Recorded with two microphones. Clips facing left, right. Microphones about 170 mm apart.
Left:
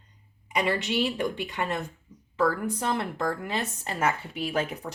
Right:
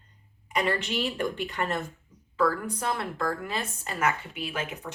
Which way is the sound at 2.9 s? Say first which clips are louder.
Left 1 dB; 20° left (ahead or behind).